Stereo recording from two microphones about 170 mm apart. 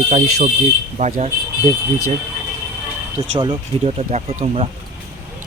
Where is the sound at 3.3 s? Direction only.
30° right (ahead or behind).